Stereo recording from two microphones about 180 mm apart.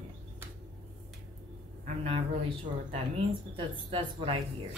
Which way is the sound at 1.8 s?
30° right (ahead or behind).